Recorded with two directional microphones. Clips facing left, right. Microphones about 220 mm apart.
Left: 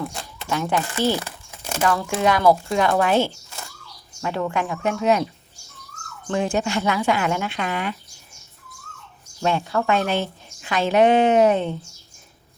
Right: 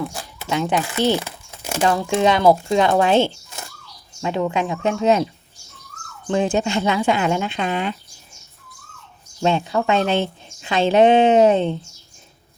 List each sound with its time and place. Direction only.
0.0 s a sound: 5° right (ahead or behind)
0.4 s a woman's voice: 15° right (ahead or behind)
9.4 s a woman's voice: 25° right (ahead or behind)